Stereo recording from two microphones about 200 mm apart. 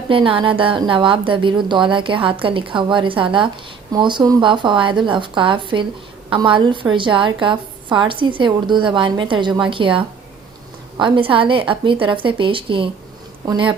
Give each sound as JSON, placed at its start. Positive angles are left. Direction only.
{"t": 0.1, "sound": "a woman's voice", "side_deg": -25}